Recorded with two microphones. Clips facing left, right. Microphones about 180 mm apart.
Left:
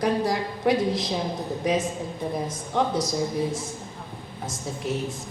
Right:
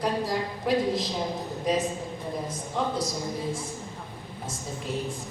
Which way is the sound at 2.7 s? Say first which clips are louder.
Left 5 dB; 70° left (ahead or behind).